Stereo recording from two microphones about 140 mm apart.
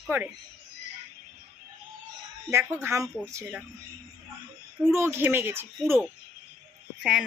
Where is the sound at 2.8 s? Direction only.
20° right (ahead or behind).